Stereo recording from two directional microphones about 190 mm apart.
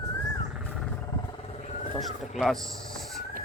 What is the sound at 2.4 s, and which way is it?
Speech, centre (ahead or behind).